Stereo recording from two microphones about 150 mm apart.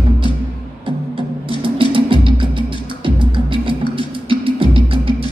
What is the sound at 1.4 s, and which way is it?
Music, 35° right (ahead or behind).